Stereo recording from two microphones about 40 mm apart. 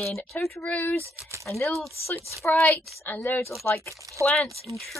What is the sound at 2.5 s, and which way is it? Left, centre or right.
Speech, left.